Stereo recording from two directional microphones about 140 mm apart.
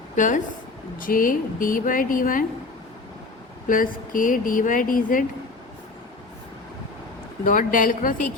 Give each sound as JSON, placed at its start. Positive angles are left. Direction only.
{"t": 0.2, "sound": "a woman's voice", "side_deg": 65}
{"t": 0.9, "sound": "speech", "side_deg": 85}
{"t": 3.7, "sound": "speech", "side_deg": 80}
{"t": 7.4, "sound": "speech", "side_deg": 70}